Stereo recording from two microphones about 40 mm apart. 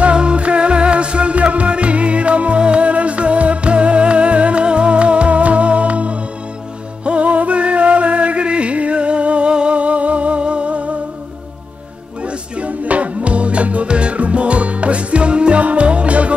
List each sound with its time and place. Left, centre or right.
0.0 s music: right
12.2 s music: right